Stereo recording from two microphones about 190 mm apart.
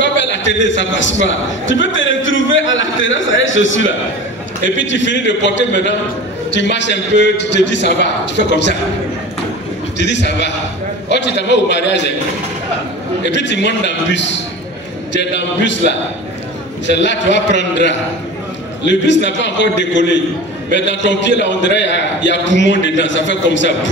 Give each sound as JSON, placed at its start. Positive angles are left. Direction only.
{"t": 0.0, "sound": "a man's voice", "side_deg": 70}
{"t": 9.9, "sound": "a man's voice", "side_deg": 70}
{"t": 13.3, "sound": "a man's voice", "side_deg": 70}